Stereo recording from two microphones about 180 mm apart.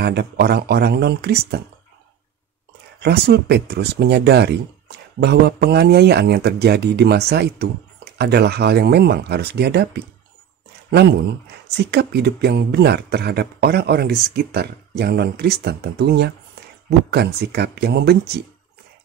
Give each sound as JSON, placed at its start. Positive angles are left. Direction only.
{"t": 0.0, "sound": "speech", "side_deg": -65}
{"t": 3.0, "sound": "speech", "side_deg": -65}